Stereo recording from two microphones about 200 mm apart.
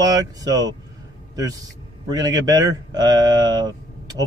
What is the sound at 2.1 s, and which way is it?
Speech, 20° right (ahead or behind).